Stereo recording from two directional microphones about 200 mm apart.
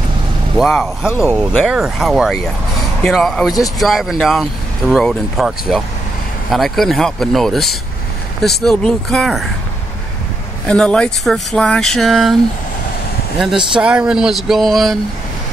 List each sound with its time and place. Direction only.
0.6 s speech: centre (ahead or behind)
1.0 s speech: 10° left (ahead or behind)
1.3 s speech: centre (ahead or behind)
10.7 s speech: 5° left (ahead or behind)
13.7 s speech: 5° right (ahead or behind)